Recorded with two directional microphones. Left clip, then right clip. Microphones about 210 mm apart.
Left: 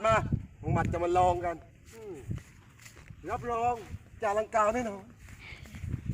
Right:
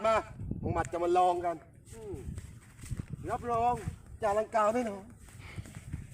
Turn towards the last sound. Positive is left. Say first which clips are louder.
# left 3 dB
turn(degrees=-10)  # may be behind; listen again after turning